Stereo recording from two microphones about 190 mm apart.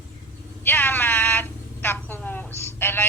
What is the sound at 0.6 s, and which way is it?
A woman's voice, 10° left (ahead or behind).